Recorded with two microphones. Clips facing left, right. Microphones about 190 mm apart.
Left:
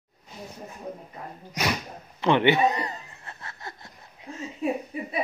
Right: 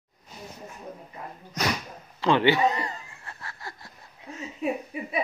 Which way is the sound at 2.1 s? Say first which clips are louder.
Left 1 dB; 20° left (ahead or behind).